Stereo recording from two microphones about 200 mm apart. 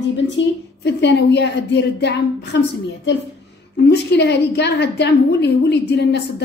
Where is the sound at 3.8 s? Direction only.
55° left (ahead or behind).